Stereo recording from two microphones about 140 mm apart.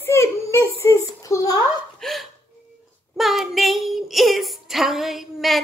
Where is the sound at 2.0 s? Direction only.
Centre (ahead or behind).